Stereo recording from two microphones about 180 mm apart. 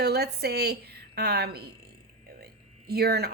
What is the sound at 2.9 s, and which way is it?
Speech, 60° right (ahead or behind).